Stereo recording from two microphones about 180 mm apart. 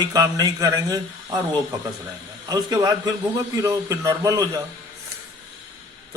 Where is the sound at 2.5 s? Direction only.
20° right (ahead or behind).